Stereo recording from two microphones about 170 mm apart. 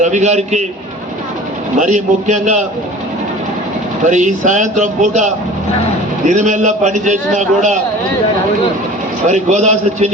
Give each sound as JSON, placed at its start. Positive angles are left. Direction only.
{"t": 0.0, "sound": "a man's voice", "side_deg": -45}
{"t": 1.8, "sound": "a man's voice", "side_deg": -45}
{"t": 4.0, "sound": "a man's voice", "side_deg": -45}
{"t": 9.2, "sound": "a man's voice", "side_deg": -45}